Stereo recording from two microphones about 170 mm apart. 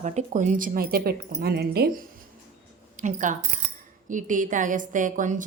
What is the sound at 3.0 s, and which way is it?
Speech, 50° right (ahead or behind).